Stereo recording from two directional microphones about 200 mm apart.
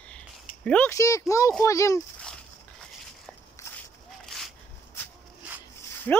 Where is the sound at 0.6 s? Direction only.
5° left (ahead or behind).